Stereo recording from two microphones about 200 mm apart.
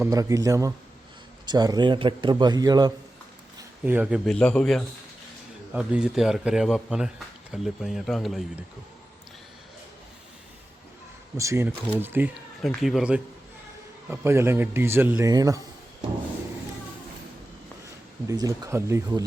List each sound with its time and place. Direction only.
0.0 s a man's voice: 15° right (ahead or behind)
3.8 s a man's voice: 5° right (ahead or behind)
11.3 s a man's voice: 15° right (ahead or behind)
18.3 s a man's voice: 15° right (ahead or behind)